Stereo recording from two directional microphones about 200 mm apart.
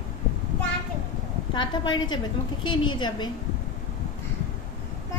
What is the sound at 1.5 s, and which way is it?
A woman's voice, 25° left (ahead or behind).